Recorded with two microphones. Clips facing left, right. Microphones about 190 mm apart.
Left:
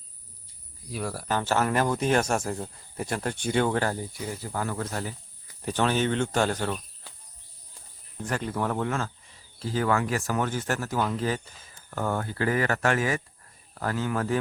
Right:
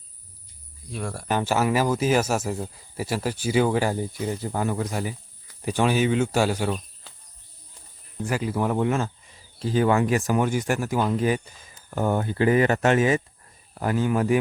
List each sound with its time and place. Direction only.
0.9 s speech: centre (ahead or behind)
1.3 s speech: 15° right (ahead or behind)
3.9 s speech: 25° right (ahead or behind); by 6.8 s 10° right (ahead or behind)
8.2 s speech: 5° right (ahead or behind)